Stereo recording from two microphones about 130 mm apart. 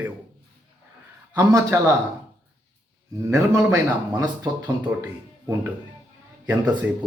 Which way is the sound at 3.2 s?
20° right (ahead or behind).